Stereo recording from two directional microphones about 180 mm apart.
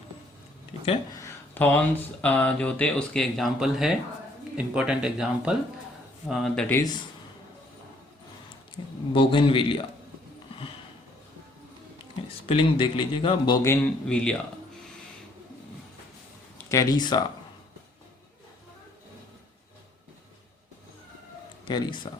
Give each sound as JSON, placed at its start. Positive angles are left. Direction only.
{"t": 0.7, "sound": "a sound", "side_deg": 30}
{"t": 1.1, "sound": "a sound", "side_deg": 15}
{"t": 2.2, "sound": "speech", "side_deg": 10}
{"t": 6.7, "sound": "speech", "side_deg": 20}
{"t": 8.8, "sound": "a man's voice", "side_deg": 25}
{"t": 12.5, "sound": "a man's voice", "side_deg": 30}
{"t": 14.1, "sound": "speech", "side_deg": 5}
{"t": 16.6, "sound": "speech", "side_deg": 15}
{"t": 21.6, "sound": "speech", "side_deg": 25}